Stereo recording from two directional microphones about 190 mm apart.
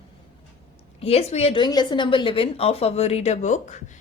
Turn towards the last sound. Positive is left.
turn(degrees=40)  # may be behind; listen again after turning